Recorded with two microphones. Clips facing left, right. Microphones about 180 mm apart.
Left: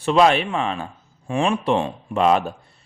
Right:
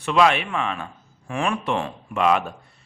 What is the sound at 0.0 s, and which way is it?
A man's voice, 35° left (ahead or behind).